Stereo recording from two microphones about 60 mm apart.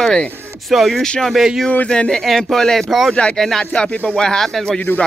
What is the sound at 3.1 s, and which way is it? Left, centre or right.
Speech, centre.